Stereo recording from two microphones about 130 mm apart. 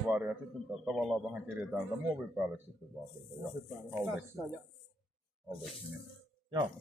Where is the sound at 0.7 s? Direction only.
Centre (ahead or behind).